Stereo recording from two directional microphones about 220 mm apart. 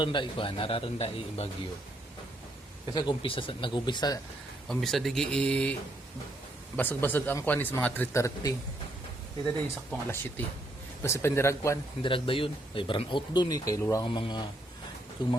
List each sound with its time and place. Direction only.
0.0 s speech: 20° left (ahead or behind)
2.9 s speech: 20° left (ahead or behind)
4.7 s speech: centre (ahead or behind)
6.7 s speech: 10° left (ahead or behind)
9.6 s speech: 10° left (ahead or behind)
12.1 s speech: 25° left (ahead or behind)